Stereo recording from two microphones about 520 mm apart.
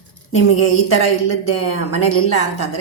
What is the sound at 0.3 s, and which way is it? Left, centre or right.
A woman's voice, left.